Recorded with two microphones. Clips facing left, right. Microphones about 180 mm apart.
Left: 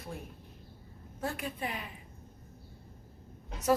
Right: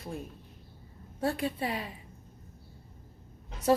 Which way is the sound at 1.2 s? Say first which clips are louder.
Right 6 dB; 30° right (ahead or behind).